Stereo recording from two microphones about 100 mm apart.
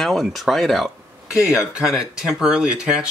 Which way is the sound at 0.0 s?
Centre (ahead or behind).